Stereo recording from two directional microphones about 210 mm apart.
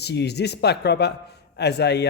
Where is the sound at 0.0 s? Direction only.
55° left (ahead or behind).